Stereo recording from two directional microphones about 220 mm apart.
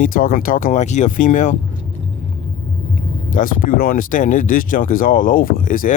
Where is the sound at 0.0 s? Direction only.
40° left (ahead or behind).